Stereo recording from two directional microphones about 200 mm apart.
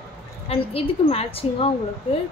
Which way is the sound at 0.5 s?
30° left (ahead or behind).